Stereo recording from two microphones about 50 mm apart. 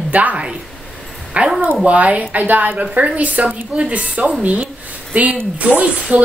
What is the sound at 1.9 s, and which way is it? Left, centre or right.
A woman's voice, right.